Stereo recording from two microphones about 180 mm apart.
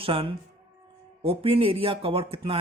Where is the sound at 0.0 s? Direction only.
30° right (ahead or behind).